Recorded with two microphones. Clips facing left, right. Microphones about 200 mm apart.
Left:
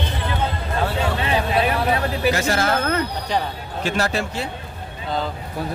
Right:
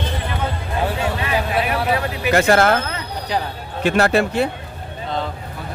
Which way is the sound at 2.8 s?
50° left (ahead or behind).